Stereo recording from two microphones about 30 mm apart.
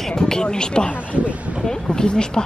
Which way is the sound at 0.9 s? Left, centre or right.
Left.